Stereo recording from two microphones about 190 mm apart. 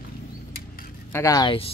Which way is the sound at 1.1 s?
15° left (ahead or behind).